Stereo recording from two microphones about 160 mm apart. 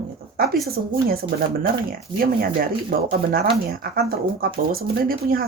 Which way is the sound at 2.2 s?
65° right (ahead or behind).